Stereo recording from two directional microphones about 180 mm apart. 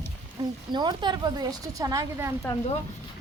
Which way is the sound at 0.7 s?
25° right (ahead or behind).